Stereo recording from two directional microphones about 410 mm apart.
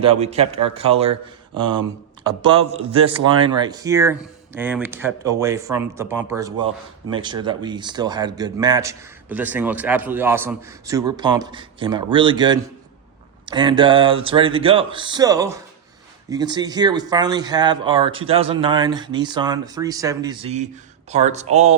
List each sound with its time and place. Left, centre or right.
0.0 s speech: centre
3.2 s speech: centre